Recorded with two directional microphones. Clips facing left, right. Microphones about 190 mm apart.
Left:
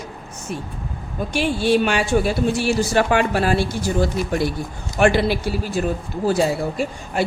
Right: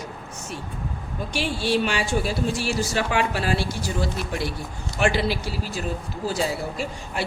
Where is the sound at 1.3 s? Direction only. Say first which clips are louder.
Left 6 dB; 50° left (ahead or behind).